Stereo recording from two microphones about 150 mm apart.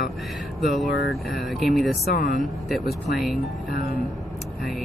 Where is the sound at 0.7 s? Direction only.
Centre (ahead or behind).